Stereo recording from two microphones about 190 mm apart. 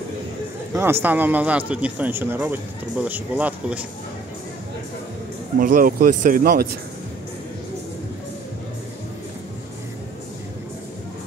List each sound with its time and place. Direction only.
0.7 s speech: 10° right (ahead or behind)
5.6 s speech: 45° right (ahead or behind)